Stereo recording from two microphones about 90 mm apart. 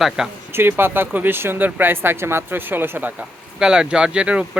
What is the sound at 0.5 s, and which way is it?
Speech, 25° right (ahead or behind).